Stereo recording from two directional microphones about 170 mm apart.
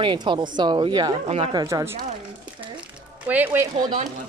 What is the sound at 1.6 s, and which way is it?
Speech, 15° right (ahead or behind).